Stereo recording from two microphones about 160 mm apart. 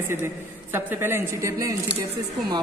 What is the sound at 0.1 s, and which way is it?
A man's voice, 15° right (ahead or behind).